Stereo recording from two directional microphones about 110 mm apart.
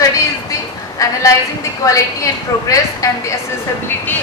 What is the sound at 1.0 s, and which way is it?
A woman's voice, 30° left (ahead or behind).